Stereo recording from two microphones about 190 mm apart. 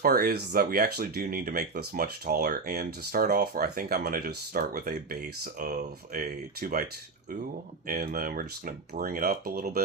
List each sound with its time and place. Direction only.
0.0 s speech: 55° right (ahead or behind)
6.1 s speech: 50° right (ahead or behind)
7.9 s speech: 50° right (ahead or behind)